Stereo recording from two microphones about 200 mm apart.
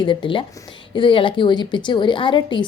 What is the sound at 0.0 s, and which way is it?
A woman's voice, 25° left (ahead or behind).